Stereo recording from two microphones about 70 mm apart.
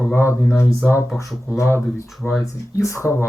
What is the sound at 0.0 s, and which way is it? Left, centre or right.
Speech, left.